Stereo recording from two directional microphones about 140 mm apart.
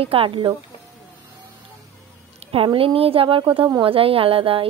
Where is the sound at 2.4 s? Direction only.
40° right (ahead or behind).